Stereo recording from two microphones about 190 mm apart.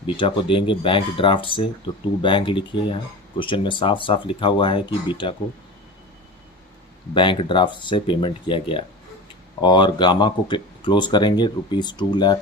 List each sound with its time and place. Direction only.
0.0 s speech: 25° left (ahead or behind)
7.1 s speech: 25° left (ahead or behind)